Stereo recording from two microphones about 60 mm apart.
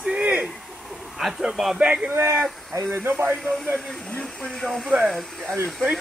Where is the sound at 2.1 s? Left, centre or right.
Right.